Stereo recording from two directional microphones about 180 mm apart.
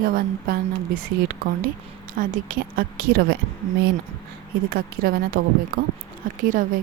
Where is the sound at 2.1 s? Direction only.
50° right (ahead or behind).